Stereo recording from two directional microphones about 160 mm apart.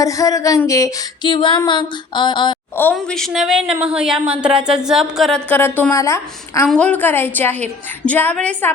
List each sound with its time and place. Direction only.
0.0 s female singing: 20° left (ahead or behind)
2.9 s a woman's voice: centre (ahead or behind)
5.5 s a woman's voice: 10° left (ahead or behind)
6.7 s a woman's voice: 5° left (ahead or behind)